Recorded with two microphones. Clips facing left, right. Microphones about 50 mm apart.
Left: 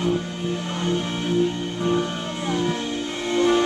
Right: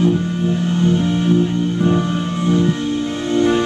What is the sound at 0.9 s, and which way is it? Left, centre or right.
Music, right.